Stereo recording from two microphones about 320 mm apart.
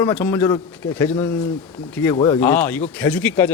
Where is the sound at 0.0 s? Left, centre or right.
Centre.